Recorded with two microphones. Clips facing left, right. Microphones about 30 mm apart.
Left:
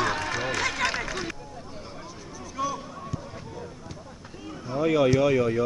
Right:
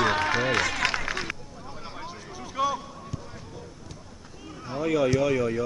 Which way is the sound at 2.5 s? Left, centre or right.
Right.